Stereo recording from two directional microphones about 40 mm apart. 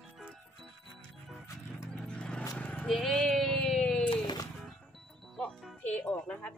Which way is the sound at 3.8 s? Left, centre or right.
Centre.